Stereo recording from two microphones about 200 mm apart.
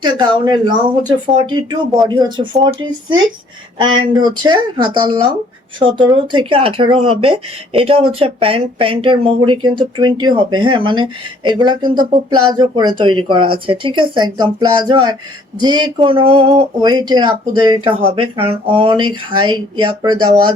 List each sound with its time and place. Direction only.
0.0 s speech: 20° right (ahead or behind)